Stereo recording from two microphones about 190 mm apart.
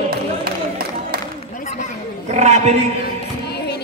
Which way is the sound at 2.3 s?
35° right (ahead or behind).